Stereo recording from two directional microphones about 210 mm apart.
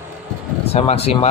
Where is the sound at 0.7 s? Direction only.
30° left (ahead or behind).